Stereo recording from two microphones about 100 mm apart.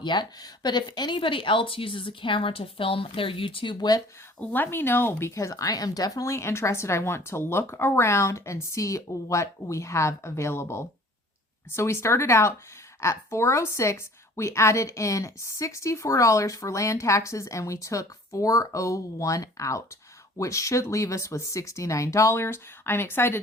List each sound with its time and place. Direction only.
0.0 s speech: 50° left (ahead or behind)
4.4 s a woman's voice: 20° left (ahead or behind)